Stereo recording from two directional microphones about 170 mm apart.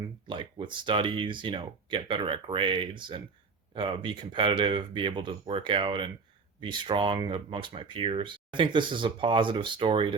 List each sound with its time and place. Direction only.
0.3 s speech: 30° right (ahead or behind)